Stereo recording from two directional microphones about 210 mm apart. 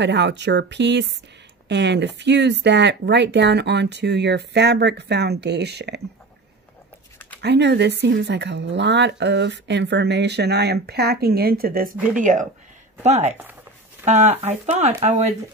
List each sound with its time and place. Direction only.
0.0 s speech: 55° right (ahead or behind)
7.4 s speech: 55° right (ahead or behind); by 15.3 s 30° right (ahead or behind)